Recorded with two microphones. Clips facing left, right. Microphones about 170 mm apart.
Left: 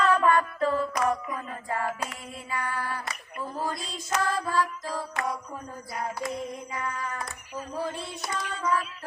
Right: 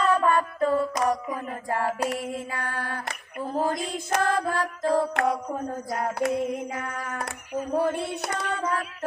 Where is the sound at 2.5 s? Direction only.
55° right (ahead or behind).